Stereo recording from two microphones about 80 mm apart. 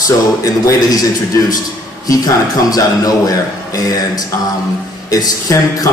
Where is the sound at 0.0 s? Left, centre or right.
Left.